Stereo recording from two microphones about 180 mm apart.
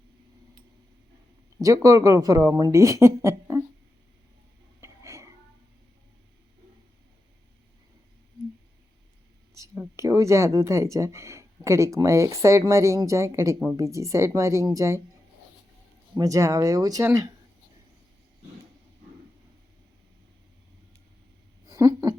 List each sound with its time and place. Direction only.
1.6 s speech: 20° right (ahead or behind)
4.8 s wheeze: 15° right (ahead or behind)
9.6 s speech: 15° right (ahead or behind)
16.1 s speech: 20° right (ahead or behind)
21.7 s speech: 20° right (ahead or behind)